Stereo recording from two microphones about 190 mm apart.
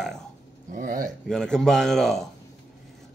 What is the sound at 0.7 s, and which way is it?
Speech, 45° right (ahead or behind).